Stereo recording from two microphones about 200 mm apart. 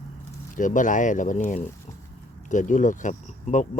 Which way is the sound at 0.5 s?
40° left (ahead or behind).